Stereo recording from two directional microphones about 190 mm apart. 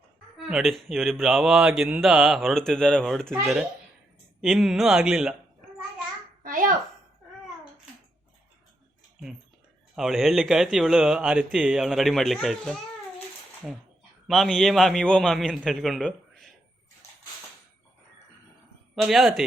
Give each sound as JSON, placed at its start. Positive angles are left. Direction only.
{"t": 0.5, "sound": "speech", "side_deg": 0}
{"t": 4.4, "sound": "speech", "side_deg": 0}
{"t": 6.4, "sound": "a sound", "side_deg": -45}
{"t": 9.9, "sound": "speech", "side_deg": 0}
{"t": 18.9, "sound": "speech", "side_deg": 0}